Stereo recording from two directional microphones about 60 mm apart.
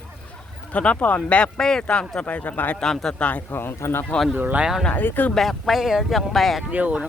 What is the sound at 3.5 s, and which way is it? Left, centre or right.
Speech, left.